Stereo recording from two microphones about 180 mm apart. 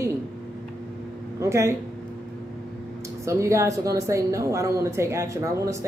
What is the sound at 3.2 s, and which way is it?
A woman's voice, 15° right (ahead or behind).